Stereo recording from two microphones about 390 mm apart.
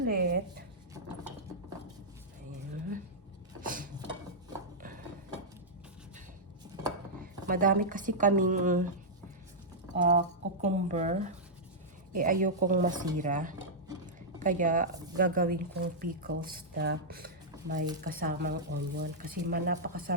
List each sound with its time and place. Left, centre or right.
0.0 s a sound: right
3.6 s a sound: right
7.4 s speech: right
9.9 s speech: centre
13.1 s cutlery: centre
14.3 s speech: centre